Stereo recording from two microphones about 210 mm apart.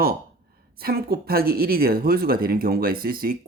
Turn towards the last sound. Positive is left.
turn(degrees=-45)  # may be behind; listen again after turning